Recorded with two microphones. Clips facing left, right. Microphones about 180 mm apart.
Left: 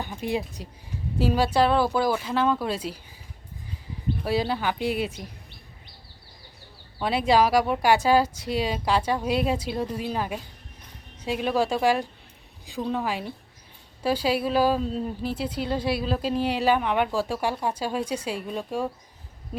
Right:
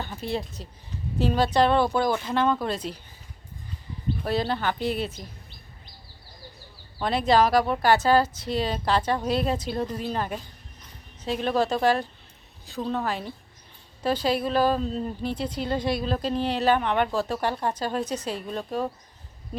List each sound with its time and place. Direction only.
0.0 s a woman's voice: 15° left (ahead or behind)
4.2 s a woman's voice: 10° left (ahead or behind)
7.0 s a woman's voice: 10° left (ahead or behind)